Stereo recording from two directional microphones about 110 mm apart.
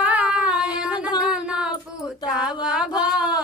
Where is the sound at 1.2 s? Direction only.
10° right (ahead or behind).